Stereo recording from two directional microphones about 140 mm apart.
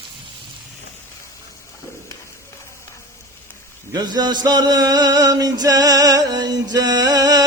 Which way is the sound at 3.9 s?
30° right (ahead or behind).